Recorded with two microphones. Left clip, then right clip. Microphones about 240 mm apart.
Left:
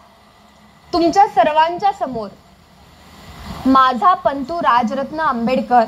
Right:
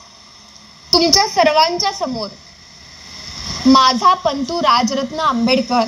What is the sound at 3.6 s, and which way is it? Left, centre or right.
A woman's voice, right.